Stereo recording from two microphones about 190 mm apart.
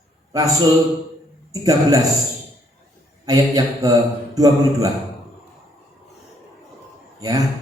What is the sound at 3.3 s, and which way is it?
A man's voice, 20° right (ahead or behind).